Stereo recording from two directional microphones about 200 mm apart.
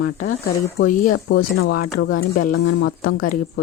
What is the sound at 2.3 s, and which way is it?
Speech, 50° left (ahead or behind).